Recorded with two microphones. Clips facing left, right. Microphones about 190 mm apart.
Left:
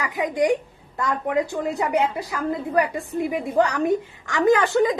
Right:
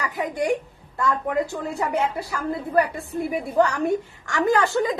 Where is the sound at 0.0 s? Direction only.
15° left (ahead or behind).